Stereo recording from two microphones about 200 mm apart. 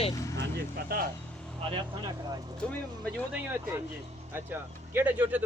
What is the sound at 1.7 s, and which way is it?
Speech, 20° right (ahead or behind).